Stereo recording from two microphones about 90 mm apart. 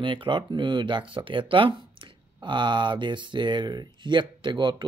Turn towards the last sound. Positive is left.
turn(degrees=-60)  # may be behind; listen again after turning